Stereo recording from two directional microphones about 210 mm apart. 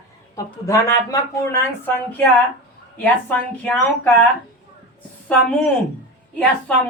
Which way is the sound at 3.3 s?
5° left (ahead or behind).